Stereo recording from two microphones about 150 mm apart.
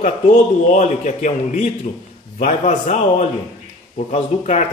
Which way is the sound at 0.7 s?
55° left (ahead or behind).